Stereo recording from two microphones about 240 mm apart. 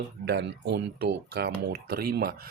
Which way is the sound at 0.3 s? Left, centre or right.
Right.